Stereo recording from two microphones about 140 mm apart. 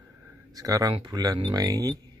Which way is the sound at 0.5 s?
25° right (ahead or behind).